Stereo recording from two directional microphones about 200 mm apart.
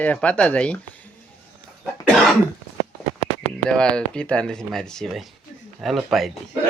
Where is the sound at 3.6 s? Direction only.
5° left (ahead or behind).